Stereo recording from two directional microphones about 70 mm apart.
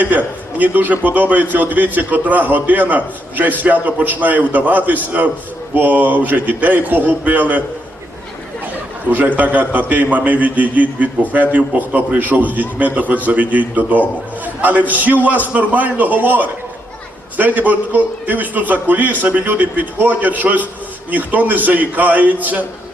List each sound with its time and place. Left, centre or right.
0.0 s a man's voice: right
9.0 s a man's voice: right